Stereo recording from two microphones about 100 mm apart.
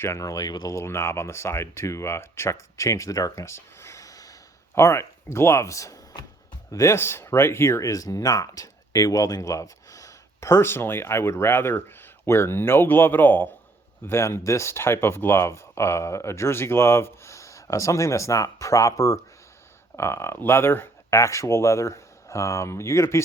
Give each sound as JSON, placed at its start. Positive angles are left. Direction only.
{"t": 0.0, "sound": "speech", "side_deg": 30}
{"t": 0.8, "sound": "speech", "side_deg": 25}